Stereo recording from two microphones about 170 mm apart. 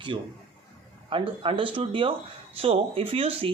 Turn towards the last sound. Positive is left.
turn(degrees=-35)  # may be behind; listen again after turning